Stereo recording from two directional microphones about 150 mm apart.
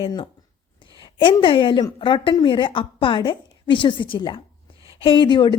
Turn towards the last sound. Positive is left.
turn(degrees=30)  # may be behind; listen again after turning